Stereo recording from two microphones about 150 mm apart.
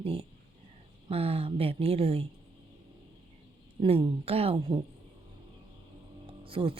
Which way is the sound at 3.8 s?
40° right (ahead or behind).